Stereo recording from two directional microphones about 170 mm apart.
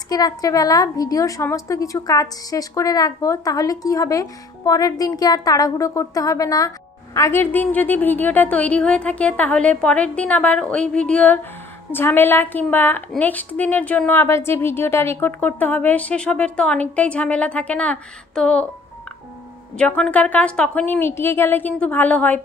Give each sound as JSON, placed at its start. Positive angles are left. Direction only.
{"t": 0.1, "sound": "a woman's voice", "side_deg": 20}
{"t": 19.8, "sound": "a woman's voice", "side_deg": 5}